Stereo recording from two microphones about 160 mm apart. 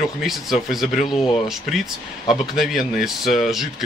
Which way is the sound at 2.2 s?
Centre (ahead or behind).